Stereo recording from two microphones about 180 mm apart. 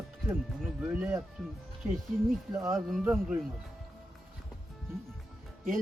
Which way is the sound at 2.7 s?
Centre (ahead or behind).